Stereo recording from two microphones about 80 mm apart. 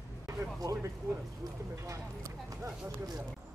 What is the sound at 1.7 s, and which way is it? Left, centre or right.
Speech, right.